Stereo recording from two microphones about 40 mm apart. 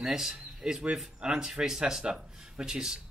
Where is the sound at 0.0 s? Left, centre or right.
Centre.